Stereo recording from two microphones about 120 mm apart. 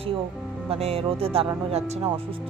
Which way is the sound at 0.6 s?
55° right (ahead or behind).